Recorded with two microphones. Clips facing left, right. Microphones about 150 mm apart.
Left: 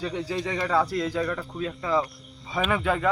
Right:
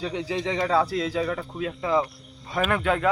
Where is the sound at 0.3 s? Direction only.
25° right (ahead or behind).